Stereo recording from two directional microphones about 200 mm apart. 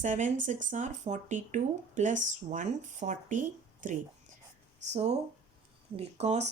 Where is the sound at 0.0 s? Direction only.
40° right (ahead or behind).